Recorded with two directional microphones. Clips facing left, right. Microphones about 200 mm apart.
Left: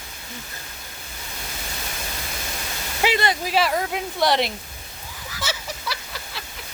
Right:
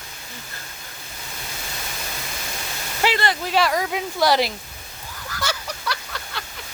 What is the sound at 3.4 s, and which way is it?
Speech, 5° left (ahead or behind).